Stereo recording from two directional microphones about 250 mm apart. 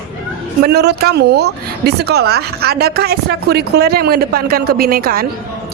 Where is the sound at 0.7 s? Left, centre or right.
Right.